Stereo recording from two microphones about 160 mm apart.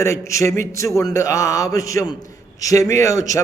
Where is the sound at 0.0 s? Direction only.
20° left (ahead or behind).